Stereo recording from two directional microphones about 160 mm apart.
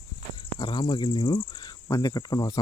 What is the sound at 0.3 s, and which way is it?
A man's voice, 30° left (ahead or behind).